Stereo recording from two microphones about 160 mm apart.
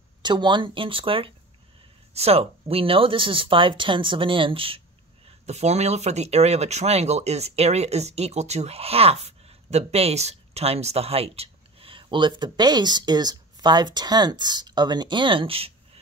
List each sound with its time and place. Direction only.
0.2 s speech: 30° right (ahead or behind)